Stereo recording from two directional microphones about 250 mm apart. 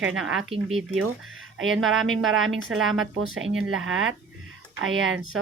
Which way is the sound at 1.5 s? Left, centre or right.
Right.